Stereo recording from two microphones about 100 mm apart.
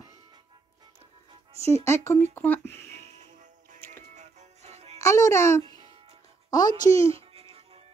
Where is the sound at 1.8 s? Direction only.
25° left (ahead or behind).